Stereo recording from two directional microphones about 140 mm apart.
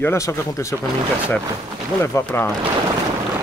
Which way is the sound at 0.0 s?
20° left (ahead or behind).